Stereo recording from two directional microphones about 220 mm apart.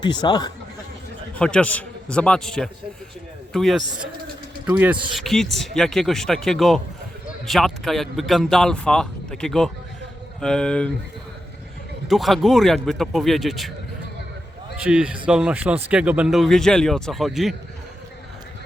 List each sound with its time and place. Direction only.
0.0 s speech: 20° left (ahead or behind)
1.4 s speech: 5° left (ahead or behind)
12.0 s speech: centre (ahead or behind)
14.8 s speech: 5° right (ahead or behind)